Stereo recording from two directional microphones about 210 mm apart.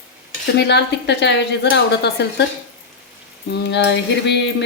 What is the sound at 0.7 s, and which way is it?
A woman's voice, 55° left (ahead or behind).